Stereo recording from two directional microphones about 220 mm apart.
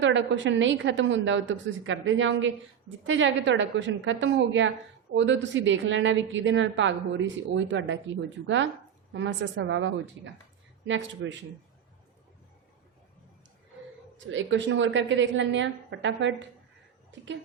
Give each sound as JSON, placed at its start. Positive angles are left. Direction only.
{"t": 0.0, "sound": "a woman's voice", "side_deg": -55}
{"t": 14.3, "sound": "a woman's voice", "side_deg": -55}